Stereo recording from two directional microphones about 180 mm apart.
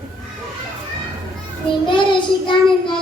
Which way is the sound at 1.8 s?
25° left (ahead or behind).